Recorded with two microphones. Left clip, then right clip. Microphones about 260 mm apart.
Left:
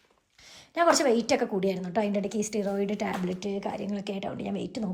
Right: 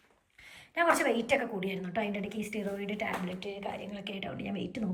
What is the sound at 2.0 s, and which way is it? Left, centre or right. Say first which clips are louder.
A woman's voice: left 6 dB; left.